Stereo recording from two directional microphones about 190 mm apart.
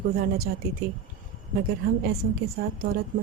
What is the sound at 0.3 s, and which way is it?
Speech, 55° right (ahead or behind).